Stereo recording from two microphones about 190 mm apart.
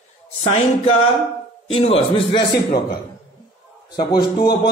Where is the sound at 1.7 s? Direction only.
30° left (ahead or behind).